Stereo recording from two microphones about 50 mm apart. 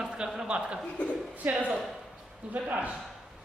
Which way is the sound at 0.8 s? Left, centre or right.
Left.